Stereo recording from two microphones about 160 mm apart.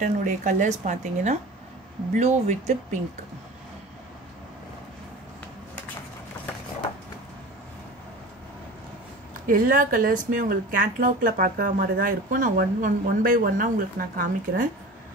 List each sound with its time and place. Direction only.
0.0 s a woman's voice: 50° right (ahead or behind)
9.5 s a woman's voice: 60° right (ahead or behind)